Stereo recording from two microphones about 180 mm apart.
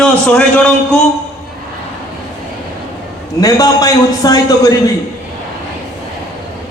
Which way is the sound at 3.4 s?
20° left (ahead or behind).